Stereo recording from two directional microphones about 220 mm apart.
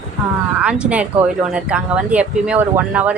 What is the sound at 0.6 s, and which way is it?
Speech, 5° right (ahead or behind).